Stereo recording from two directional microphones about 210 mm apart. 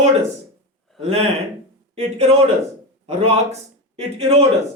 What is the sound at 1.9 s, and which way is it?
Speech, 30° right (ahead or behind).